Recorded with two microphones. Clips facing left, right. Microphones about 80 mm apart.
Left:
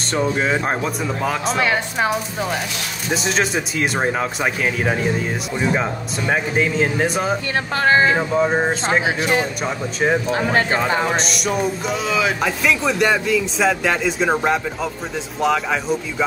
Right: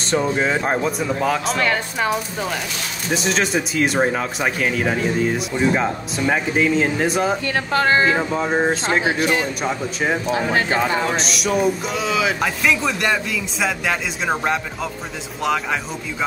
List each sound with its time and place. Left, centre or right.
0.0 s speech: centre
3.1 s speech: centre
7.7 s speech: left
8.2 s speech: centre
10.3 s speech: left
10.8 s speech: centre